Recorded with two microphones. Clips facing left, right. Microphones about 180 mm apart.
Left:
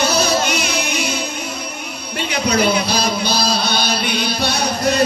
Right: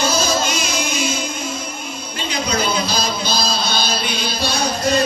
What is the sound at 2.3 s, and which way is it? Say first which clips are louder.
Music: left 4 dB; 65° left (ahead or behind).